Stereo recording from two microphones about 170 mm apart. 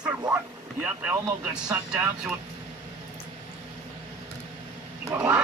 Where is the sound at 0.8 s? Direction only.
5° right (ahead or behind).